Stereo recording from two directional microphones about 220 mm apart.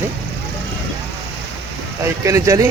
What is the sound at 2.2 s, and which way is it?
Speech, 15° right (ahead or behind).